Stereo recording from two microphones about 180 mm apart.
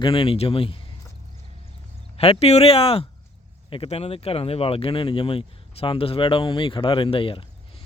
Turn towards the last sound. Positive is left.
turn(degrees=30)  # may be behind; listen again after turning